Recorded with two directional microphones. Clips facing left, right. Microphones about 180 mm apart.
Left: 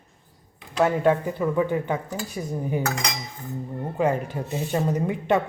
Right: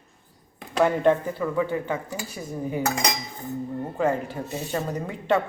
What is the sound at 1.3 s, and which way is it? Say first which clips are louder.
A woman's voice: left 2 dB; 20° left (ahead or behind).